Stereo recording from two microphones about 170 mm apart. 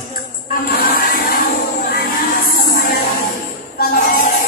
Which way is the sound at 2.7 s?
55° left (ahead or behind).